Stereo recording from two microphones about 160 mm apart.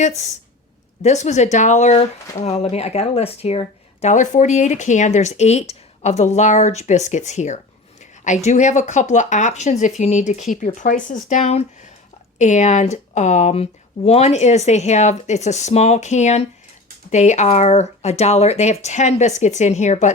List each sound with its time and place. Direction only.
1.0 s speech: 45° left (ahead or behind)